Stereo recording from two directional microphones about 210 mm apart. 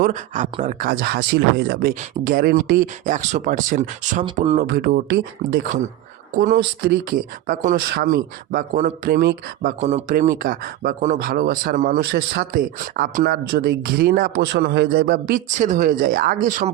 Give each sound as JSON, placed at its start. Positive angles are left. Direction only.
{"t": 0.0, "sound": "speech", "side_deg": -35}
{"t": 4.8, "sound": "speech", "side_deg": -45}